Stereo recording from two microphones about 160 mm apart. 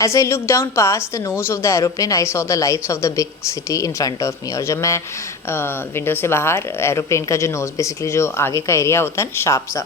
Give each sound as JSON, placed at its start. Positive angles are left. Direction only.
{"t": 0.0, "sound": "speech", "side_deg": 20}